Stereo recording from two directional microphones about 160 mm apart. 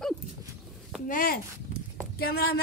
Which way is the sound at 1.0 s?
65° left (ahead or behind).